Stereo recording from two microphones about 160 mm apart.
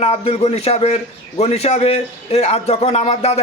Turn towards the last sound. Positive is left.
turn(degrees=40)  # may be behind; listen again after turning